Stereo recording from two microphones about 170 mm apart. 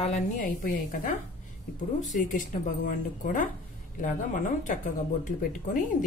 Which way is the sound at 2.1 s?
50° left (ahead or behind).